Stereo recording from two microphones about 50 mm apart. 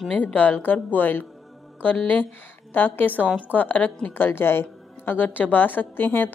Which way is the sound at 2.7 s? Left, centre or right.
Left.